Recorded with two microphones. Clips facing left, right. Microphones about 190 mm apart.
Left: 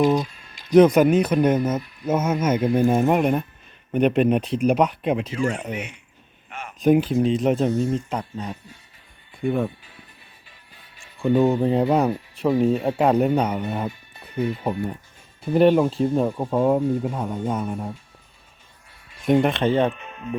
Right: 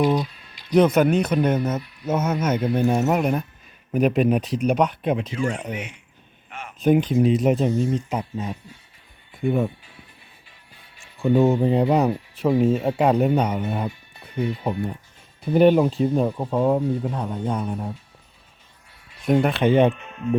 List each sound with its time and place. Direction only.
0.0 s a sound: 45° left (ahead or behind)
0.9 s speech: 5° left (ahead or behind)
6.8 s speech: centre (ahead or behind)
11.2 s speech: 5° right (ahead or behind)
16.4 s speech: 5° left (ahead or behind)
19.2 s speech: centre (ahead or behind)
19.6 s speech: 15° right (ahead or behind)